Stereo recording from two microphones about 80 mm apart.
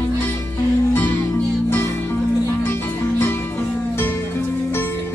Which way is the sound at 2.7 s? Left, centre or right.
Left.